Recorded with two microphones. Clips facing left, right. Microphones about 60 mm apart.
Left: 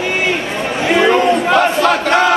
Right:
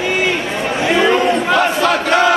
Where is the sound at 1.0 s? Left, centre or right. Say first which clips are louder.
Left 3 dB; left.